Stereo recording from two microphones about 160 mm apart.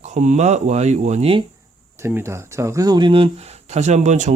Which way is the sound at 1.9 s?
15° right (ahead or behind).